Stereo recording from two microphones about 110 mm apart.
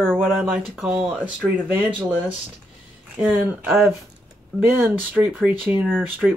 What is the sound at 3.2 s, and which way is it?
Speech, 10° right (ahead or behind).